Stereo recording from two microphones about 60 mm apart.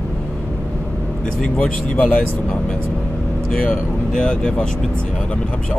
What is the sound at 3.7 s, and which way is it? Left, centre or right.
Speech, centre.